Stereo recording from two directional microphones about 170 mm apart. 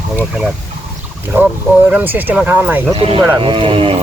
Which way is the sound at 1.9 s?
10° right (ahead or behind).